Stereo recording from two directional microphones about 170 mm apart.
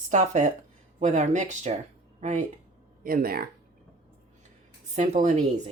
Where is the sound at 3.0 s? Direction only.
60° right (ahead or behind).